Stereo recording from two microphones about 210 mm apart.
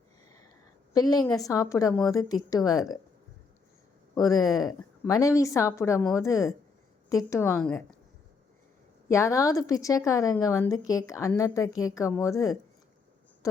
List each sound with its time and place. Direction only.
0.9 s a woman's voice: 20° left (ahead or behind)
4.1 s a woman's voice: 15° left (ahead or behind)
9.0 s a woman's voice: 15° left (ahead or behind)